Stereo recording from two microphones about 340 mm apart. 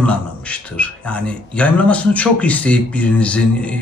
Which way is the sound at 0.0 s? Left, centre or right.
Centre.